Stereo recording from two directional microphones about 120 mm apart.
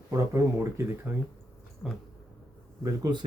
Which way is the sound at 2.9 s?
30° right (ahead or behind).